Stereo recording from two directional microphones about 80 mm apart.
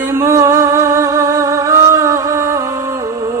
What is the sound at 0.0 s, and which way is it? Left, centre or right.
Music, right.